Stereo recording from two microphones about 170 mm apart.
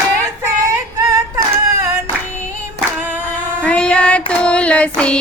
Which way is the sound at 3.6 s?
5° left (ahead or behind).